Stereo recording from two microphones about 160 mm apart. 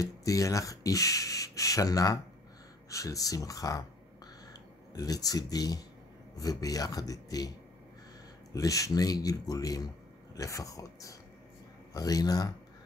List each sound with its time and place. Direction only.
0.0 s speech: 20° left (ahead or behind)
4.9 s speech: 25° left (ahead or behind)
8.5 s speech: 20° left (ahead or behind)